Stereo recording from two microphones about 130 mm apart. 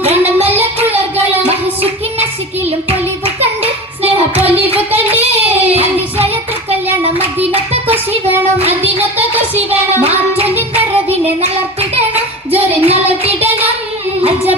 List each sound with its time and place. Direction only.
0.9 s child singing: 50° right (ahead or behind)
3.4 s child singing: 50° right (ahead or behind)
4.5 s music: 50° right (ahead or behind)
5.5 s child singing: 50° right (ahead or behind)
8.5 s music: 50° right (ahead or behind)
10.0 s child singing: 50° right (ahead or behind)
12.5 s a sound: 50° right (ahead or behind)
14.2 s music: 50° right (ahead or behind)